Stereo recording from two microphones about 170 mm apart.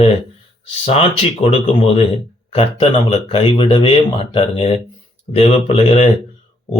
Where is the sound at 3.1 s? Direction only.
30° left (ahead or behind).